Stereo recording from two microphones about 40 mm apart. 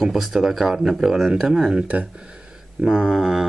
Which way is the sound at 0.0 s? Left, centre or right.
Centre.